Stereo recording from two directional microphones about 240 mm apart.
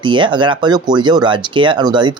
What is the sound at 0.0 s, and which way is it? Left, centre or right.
Speech, centre.